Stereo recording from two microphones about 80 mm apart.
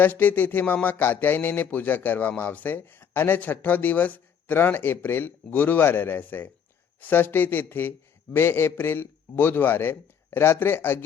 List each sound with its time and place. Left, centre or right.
0.0 s speech: left